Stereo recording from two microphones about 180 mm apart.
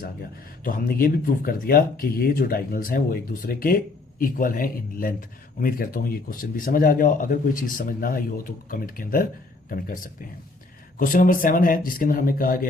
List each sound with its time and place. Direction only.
0.6 s speech: 50° left (ahead or behind)